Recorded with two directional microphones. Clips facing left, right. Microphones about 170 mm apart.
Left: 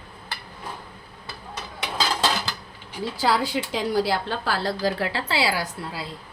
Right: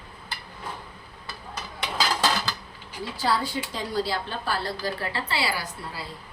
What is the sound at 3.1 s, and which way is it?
A woman's voice, 90° left.